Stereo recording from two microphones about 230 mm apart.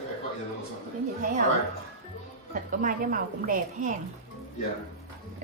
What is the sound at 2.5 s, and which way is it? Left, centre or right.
A woman's voice, right.